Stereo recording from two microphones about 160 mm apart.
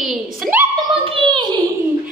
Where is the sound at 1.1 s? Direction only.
30° right (ahead or behind).